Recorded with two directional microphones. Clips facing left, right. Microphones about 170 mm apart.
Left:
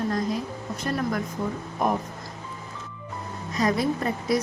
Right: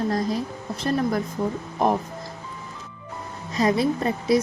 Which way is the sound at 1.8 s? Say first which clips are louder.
Right 3 dB; 35° right (ahead or behind).